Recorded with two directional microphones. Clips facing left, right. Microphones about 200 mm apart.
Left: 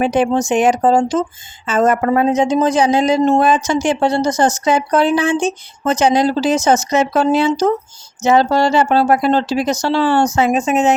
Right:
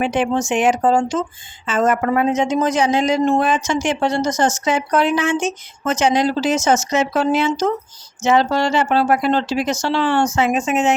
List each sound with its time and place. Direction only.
0.0 s speech: 40° left (ahead or behind)